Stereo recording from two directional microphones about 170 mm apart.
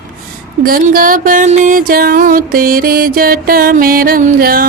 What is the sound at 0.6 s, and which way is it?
Music, 55° right (ahead or behind).